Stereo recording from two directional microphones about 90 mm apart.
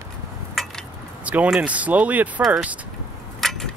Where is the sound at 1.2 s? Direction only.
15° right (ahead or behind).